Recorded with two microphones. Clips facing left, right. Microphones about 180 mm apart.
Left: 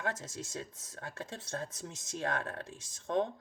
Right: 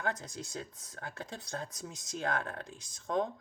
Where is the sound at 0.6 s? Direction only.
25° left (ahead or behind).